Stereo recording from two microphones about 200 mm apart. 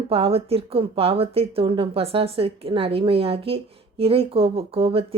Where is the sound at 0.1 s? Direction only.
30° right (ahead or behind).